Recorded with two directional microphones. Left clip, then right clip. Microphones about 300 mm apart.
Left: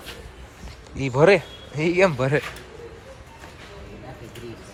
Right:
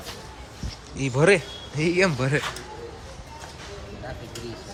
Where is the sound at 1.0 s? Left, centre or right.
Centre.